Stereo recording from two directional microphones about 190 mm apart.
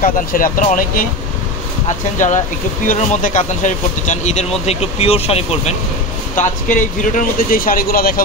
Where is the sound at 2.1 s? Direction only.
40° left (ahead or behind).